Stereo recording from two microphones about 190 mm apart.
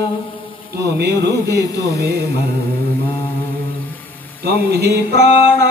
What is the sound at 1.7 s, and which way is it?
Speech, 15° left (ahead or behind).